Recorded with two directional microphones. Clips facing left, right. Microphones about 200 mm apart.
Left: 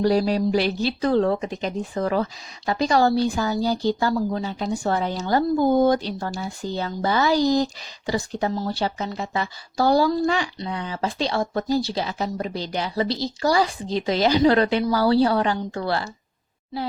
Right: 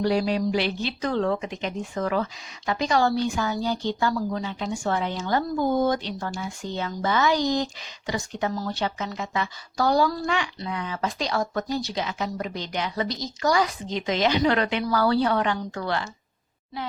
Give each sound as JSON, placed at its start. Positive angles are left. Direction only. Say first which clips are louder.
{"t": 0.0, "sound": "a woman's voice", "louder": "left 3 dB", "side_deg": 40}